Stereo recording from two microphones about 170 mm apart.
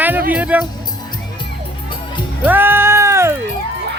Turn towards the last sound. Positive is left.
turn(degrees=-15)  # may be behind; listen again after turning